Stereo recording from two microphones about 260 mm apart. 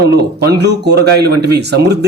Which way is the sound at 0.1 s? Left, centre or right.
Right.